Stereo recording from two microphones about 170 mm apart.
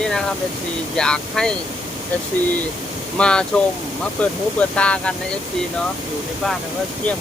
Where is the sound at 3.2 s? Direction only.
5° left (ahead or behind).